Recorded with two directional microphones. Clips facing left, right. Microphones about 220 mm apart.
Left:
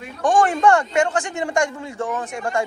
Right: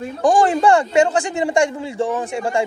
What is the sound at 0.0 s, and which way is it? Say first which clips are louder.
A man's voice: right 3 dB; 35° right (ahead or behind).